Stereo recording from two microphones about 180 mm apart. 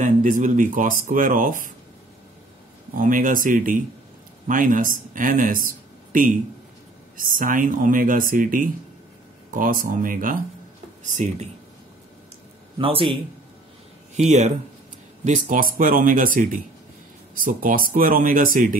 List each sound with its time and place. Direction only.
0.0 s speech: 45° right (ahead or behind)
3.0 s a man's voice: 50° right (ahead or behind)
12.7 s a man's voice: 30° right (ahead or behind); by 18.8 s 50° right (ahead or behind)